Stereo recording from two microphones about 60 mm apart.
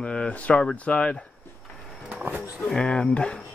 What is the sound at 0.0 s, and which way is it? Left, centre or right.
Speech, centre.